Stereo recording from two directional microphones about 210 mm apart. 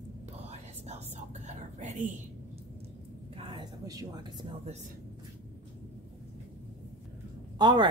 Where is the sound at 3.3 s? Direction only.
25° right (ahead or behind).